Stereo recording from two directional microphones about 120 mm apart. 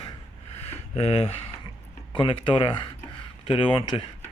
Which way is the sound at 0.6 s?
60° left (ahead or behind).